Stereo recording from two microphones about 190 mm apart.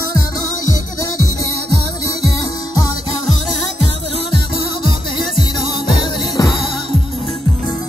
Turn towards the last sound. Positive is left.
turn(degrees=20)  # may be behind; listen again after turning